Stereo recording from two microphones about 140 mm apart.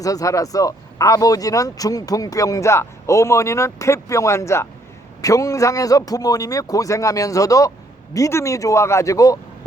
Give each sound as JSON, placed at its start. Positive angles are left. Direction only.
{"t": 0.0, "sound": "speech", "side_deg": 25}